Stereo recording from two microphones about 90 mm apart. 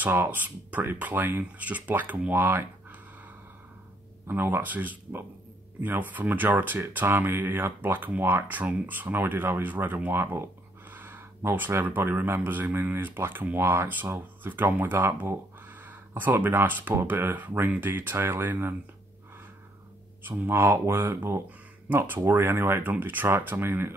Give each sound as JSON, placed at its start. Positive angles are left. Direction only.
{"t": 0.0, "sound": "speech", "side_deg": -20}
{"t": 4.3, "sound": "speech", "side_deg": -25}
{"t": 20.2, "sound": "speech", "side_deg": -30}